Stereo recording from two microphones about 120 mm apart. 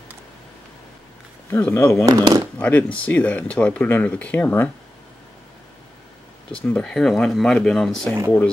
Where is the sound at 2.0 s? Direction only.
30° right (ahead or behind).